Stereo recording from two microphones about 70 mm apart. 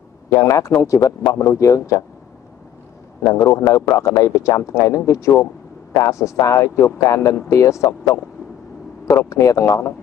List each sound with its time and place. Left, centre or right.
0.3 s a man's voice: left
3.3 s a man's voice: left
9.3 s a man's voice: left